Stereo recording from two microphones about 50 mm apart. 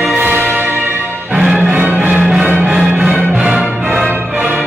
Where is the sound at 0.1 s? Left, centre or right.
Right.